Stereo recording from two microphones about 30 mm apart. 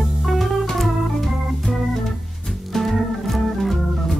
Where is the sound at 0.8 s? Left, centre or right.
Centre.